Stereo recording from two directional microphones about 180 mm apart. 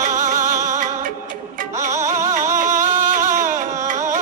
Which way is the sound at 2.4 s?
45° right (ahead or behind).